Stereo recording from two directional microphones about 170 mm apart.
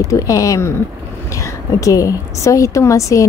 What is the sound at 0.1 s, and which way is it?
A woman's voice, 20° left (ahead or behind).